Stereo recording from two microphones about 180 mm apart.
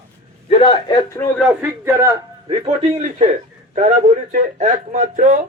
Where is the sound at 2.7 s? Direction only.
35° right (ahead or behind).